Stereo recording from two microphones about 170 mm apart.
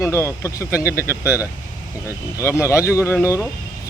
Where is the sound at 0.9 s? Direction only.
10° right (ahead or behind).